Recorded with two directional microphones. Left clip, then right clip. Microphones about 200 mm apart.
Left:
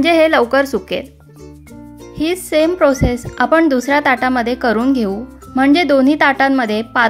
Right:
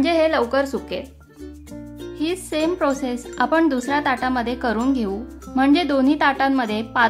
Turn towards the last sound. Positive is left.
turn(degrees=25)  # may be behind; listen again after turning